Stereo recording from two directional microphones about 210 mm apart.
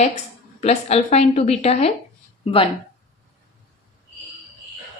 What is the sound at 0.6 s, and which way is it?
A woman's voice, 30° left (ahead or behind).